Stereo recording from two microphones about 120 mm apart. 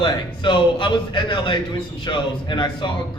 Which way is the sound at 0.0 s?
40° left (ahead or behind).